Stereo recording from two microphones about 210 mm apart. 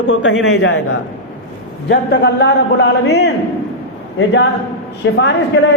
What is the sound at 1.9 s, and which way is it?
A man's voice, 55° left (ahead or behind).